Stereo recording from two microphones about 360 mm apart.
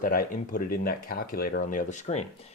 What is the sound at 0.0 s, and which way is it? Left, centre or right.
Speech, left.